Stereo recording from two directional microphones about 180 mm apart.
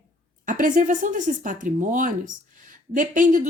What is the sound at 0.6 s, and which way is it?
A woman's voice, 50° right (ahead or behind).